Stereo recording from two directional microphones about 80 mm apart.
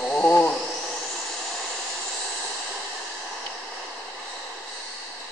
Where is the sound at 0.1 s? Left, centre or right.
Left.